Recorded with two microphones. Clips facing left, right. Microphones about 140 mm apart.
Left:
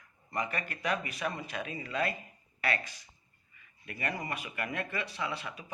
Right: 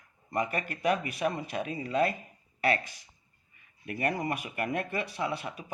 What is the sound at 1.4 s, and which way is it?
Speech, 45° right (ahead or behind).